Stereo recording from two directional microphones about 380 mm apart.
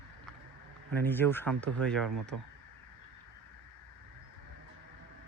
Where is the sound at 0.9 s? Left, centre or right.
Centre.